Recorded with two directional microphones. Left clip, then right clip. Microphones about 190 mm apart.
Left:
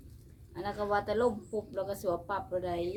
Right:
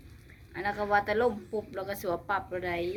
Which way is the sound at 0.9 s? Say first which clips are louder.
Right 3 dB; 10° right (ahead or behind).